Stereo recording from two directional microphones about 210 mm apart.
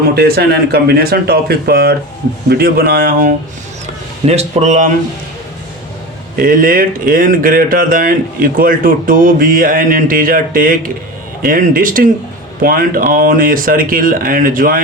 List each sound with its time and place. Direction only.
0.2 s speech: 50° right (ahead or behind)
6.3 s speech: 40° right (ahead or behind)